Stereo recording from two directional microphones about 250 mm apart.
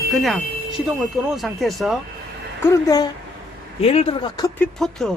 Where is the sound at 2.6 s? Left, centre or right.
Centre.